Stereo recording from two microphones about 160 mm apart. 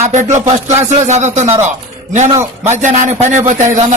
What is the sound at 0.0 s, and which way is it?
A man's voice, 45° right (ahead or behind).